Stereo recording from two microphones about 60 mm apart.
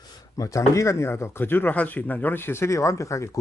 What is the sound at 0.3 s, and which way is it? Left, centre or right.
Speech, left.